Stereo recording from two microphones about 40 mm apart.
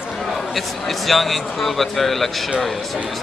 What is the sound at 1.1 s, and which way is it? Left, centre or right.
Speech, centre.